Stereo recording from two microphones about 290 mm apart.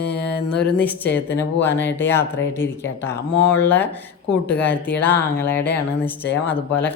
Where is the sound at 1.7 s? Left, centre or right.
Left.